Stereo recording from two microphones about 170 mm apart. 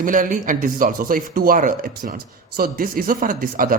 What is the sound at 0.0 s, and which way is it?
A man's voice, 50° right (ahead or behind).